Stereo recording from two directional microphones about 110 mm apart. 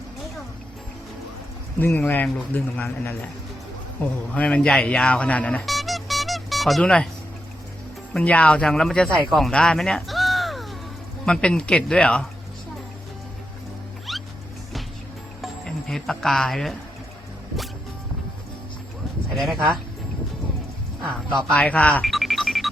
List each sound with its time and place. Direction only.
1.8 s speech: 15° left (ahead or behind)
4.3 s speech: 10° left (ahead or behind)
5.6 s music: centre (ahead or behind)
8.1 s speech: 10° left (ahead or behind)
9.3 s a sound: 5° left (ahead or behind)
11.3 s speech: 10° left (ahead or behind)
14.1 s music: centre (ahead or behind)
15.4 s speech: 5° left (ahead or behind)
19.3 s speech: centre (ahead or behind)
21.1 s speech: 5° left (ahead or behind)
21.6 s speech: 15° left (ahead or behind)
22.0 s music: centre (ahead or behind)